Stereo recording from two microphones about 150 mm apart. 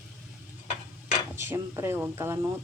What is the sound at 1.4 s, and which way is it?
Speech, 15° right (ahead or behind).